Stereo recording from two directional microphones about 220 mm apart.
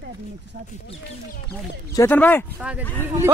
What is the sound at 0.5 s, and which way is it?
Speech, 45° right (ahead or behind).